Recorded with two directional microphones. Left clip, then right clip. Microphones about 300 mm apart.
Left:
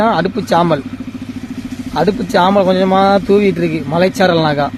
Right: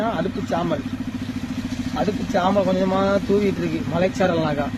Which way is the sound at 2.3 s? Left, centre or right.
Left.